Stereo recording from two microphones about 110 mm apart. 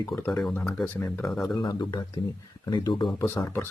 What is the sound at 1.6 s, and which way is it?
Speech, 40° left (ahead or behind).